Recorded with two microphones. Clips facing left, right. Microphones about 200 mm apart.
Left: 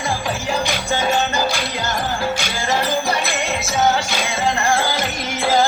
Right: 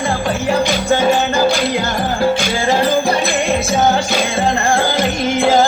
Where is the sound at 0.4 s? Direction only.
55° right (ahead or behind).